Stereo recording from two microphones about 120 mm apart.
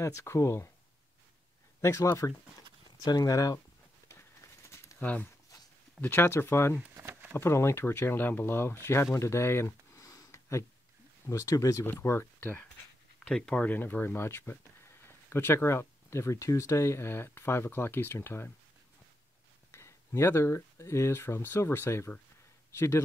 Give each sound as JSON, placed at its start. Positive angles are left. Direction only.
{"t": 0.0, "sound": "speech", "side_deg": 25}
{"t": 1.8, "sound": "speech", "side_deg": 25}
{"t": 4.6, "sound": "a sound", "side_deg": 20}
{"t": 5.0, "sound": "speech", "side_deg": 15}
{"t": 6.9, "sound": "a sound", "side_deg": -20}
{"t": 7.3, "sound": "speech", "side_deg": 20}
{"t": 19.7, "sound": "speech", "side_deg": 20}